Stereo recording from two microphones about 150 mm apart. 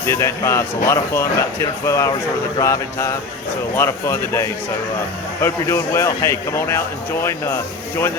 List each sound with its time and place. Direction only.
0.0 s a man's voice: 20° left (ahead or behind)